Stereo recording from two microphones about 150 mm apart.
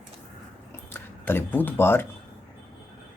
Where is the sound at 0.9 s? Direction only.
15° left (ahead or behind).